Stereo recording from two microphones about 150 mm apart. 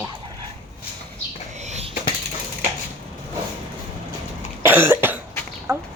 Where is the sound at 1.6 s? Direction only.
50° right (ahead or behind).